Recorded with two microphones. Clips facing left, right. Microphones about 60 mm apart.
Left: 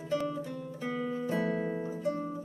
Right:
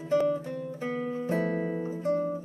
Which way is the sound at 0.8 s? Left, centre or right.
Right.